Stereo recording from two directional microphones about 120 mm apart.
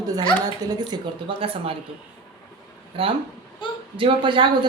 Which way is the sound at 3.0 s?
50° right (ahead or behind).